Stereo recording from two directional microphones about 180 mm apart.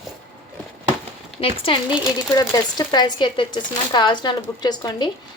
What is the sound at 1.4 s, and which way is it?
A woman's voice, 30° left (ahead or behind).